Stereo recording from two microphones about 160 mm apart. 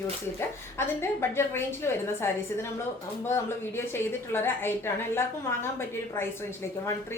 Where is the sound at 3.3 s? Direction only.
15° left (ahead or behind).